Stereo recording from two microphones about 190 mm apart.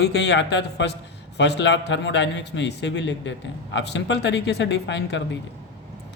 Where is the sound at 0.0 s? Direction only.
65° left (ahead or behind).